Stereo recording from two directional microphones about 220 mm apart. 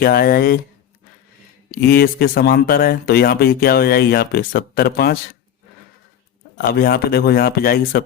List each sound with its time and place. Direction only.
0.0 s speech: 45° left (ahead or behind)
1.7 s speech: 45° left (ahead or behind)
6.6 s speech: 40° left (ahead or behind)